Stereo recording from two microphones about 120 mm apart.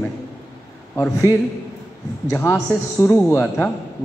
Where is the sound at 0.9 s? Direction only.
20° left (ahead or behind).